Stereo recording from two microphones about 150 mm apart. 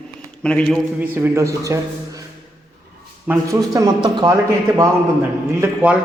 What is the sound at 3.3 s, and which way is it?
Speech, 10° right (ahead or behind).